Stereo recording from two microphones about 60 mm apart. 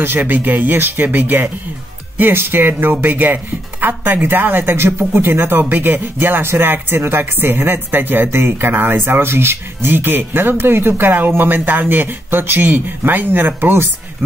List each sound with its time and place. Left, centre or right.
0.0 s speech: right